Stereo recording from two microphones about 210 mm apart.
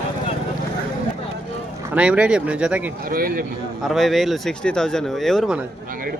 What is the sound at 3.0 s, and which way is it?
Speech, 45° right (ahead or behind).